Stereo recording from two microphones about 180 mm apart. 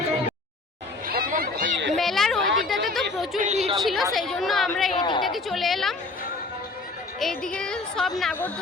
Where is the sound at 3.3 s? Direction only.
40° right (ahead or behind).